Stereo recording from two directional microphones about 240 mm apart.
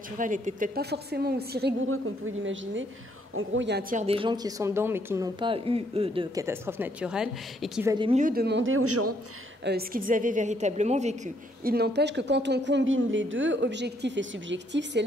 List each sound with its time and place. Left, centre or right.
0.2 s a woman's voice: right
1.9 s a woman's voice: right
3.9 s speech: right; by 7.9 s centre
7.9 s speech: centre
8.2 s a woman's voice: right
9.7 s a woman's voice: right
11.6 s a woman's voice: right